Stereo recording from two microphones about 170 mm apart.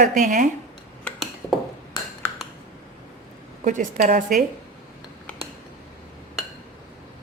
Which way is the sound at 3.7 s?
50° right (ahead or behind).